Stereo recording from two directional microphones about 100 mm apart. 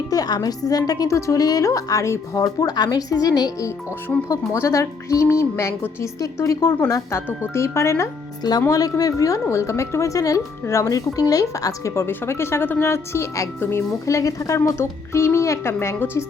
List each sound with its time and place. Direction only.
0.1 s a woman's voice: 40° left (ahead or behind)
4.3 s a woman's voice: 30° left (ahead or behind)